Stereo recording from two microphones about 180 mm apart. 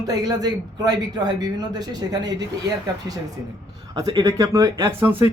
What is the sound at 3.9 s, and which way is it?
A man's voice, 20° right (ahead or behind).